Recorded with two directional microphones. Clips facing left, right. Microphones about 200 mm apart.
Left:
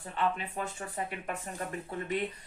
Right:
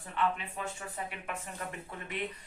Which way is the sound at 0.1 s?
35° left (ahead or behind).